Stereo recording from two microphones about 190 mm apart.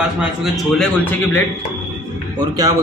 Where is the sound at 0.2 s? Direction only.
Centre (ahead or behind).